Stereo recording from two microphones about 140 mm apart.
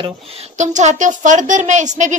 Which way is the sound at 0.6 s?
60° right (ahead or behind).